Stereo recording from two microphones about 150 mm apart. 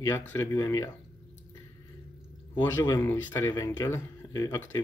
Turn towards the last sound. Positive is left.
turn(degrees=20)  # may be behind; listen again after turning